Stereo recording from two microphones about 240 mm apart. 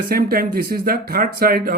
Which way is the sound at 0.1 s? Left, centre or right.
Right.